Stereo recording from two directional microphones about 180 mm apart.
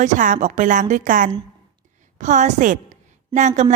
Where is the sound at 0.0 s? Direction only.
45° right (ahead or behind).